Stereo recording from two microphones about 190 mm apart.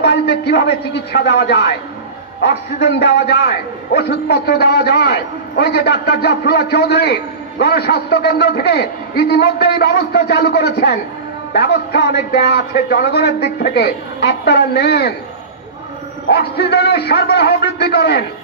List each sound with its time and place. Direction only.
0.0 s a man's voice: 65° left (ahead or behind)
16.3 s a man's voice: 60° left (ahead or behind)